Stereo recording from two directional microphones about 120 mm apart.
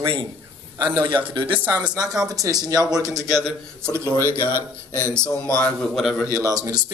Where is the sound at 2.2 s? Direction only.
30° right (ahead or behind).